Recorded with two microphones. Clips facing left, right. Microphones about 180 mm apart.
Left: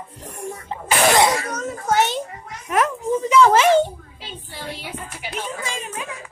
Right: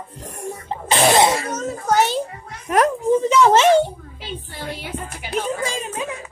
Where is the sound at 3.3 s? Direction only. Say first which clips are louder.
Left 2 dB; 25° right (ahead or behind).